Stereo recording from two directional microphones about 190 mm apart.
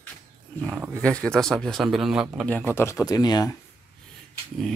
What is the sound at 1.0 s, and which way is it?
A man's voice, 5° left (ahead or behind).